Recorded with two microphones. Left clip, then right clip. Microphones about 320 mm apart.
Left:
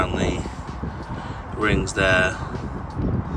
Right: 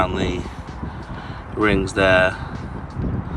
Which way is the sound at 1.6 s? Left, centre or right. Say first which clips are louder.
Right 4 dB; centre.